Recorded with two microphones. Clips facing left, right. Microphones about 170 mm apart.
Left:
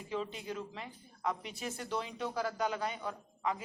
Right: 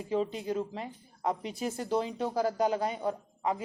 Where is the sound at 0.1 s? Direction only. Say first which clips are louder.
Right 8 dB; 35° right (ahead or behind).